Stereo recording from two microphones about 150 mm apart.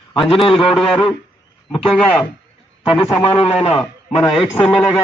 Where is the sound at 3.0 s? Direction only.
40° left (ahead or behind).